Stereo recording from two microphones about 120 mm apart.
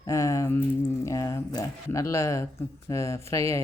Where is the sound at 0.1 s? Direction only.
25° left (ahead or behind).